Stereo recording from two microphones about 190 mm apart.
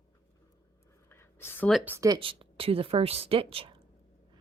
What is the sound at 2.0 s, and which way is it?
Speech, 25° right (ahead or behind).